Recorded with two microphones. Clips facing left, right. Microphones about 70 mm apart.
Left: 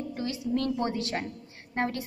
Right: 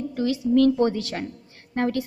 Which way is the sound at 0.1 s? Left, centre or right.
Left.